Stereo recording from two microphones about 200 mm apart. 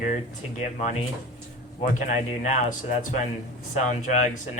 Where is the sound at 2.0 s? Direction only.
40° left (ahead or behind).